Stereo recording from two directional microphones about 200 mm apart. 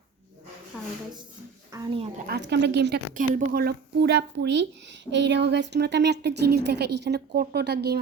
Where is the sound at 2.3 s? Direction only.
60° right (ahead or behind).